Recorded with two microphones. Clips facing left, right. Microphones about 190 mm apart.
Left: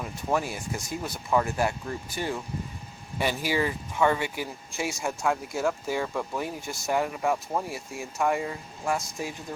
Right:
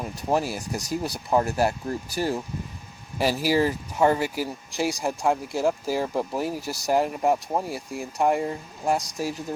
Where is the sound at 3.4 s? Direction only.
40° right (ahead or behind).